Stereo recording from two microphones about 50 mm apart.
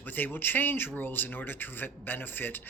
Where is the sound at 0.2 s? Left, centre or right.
Left.